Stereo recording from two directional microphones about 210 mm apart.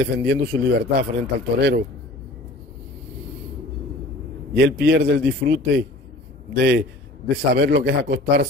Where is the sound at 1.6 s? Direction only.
50° right (ahead or behind).